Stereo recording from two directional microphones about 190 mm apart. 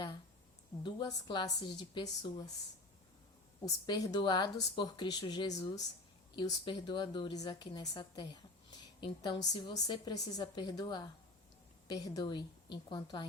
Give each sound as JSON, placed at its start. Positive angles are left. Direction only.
{"t": 0.8, "sound": "a woman's voice", "side_deg": 25}
{"t": 3.8, "sound": "a woman's voice", "side_deg": 20}